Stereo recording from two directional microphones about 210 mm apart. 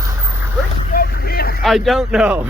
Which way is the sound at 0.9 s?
45° left (ahead or behind).